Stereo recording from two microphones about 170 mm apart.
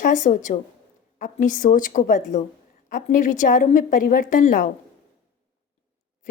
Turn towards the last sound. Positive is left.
turn(degrees=50)  # may be behind; listen again after turning